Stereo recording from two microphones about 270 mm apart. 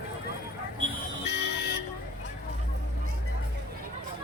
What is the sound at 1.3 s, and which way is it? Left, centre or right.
Music, left.